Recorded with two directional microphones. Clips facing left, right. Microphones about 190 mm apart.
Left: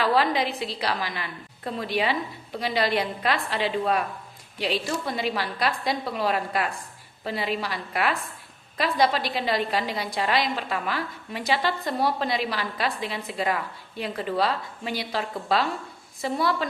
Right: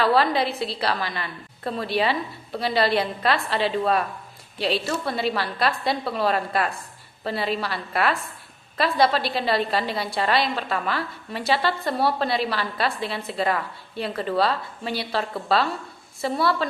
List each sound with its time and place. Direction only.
0.2 s a woman's voice: 15° left (ahead or behind)